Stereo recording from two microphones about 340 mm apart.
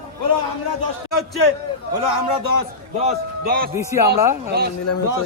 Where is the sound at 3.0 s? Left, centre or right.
Right.